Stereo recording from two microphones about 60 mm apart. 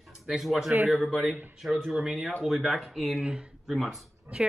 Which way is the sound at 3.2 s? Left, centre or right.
Centre.